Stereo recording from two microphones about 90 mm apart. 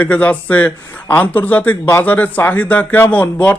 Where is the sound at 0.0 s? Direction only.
15° left (ahead or behind).